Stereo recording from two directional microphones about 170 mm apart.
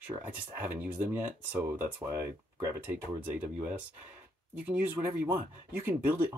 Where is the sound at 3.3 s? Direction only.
10° right (ahead or behind).